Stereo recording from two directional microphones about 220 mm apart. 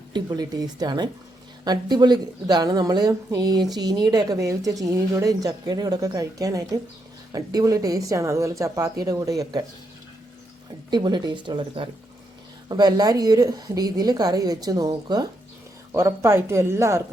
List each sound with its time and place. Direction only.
0.1 s a woman's voice: 20° right (ahead or behind)
10.9 s a woman's voice: 20° right (ahead or behind)